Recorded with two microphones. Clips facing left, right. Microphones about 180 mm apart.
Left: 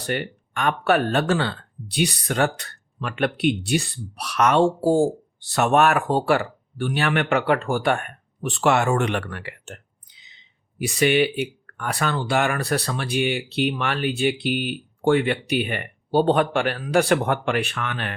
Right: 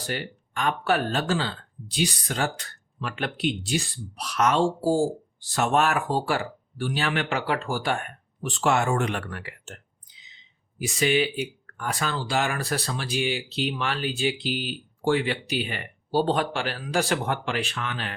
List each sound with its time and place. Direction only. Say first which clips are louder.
0.0 s speech: left 5 dB; 60° left (ahead or behind)